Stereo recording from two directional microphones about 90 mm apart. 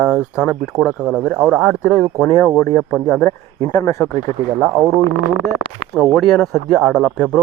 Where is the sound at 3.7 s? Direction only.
40° left (ahead or behind).